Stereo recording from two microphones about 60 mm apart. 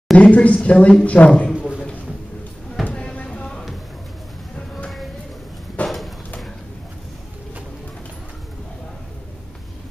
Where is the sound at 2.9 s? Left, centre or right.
Centre.